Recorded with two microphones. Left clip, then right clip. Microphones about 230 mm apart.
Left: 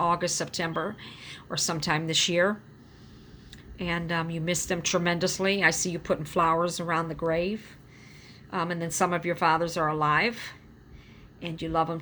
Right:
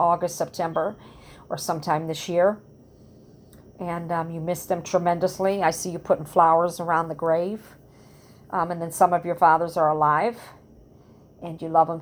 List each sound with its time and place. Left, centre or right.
0.0 s a sound: left
0.3 s a woman's voice: left
3.8 s a woman's voice: left
8.4 s a woman's voice: left